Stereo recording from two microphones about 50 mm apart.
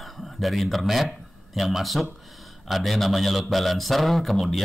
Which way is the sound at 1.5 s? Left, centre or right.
Centre.